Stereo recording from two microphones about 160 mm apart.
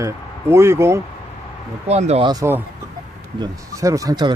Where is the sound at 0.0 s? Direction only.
15° right (ahead or behind).